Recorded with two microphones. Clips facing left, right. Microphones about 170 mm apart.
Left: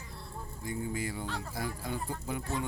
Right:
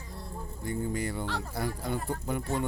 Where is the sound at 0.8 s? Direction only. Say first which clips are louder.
Right 3 dB; 65° right (ahead or behind).